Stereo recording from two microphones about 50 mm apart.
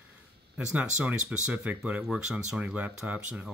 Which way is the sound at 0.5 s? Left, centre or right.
Right.